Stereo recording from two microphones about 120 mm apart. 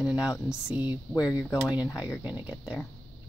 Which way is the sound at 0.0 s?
5° right (ahead or behind).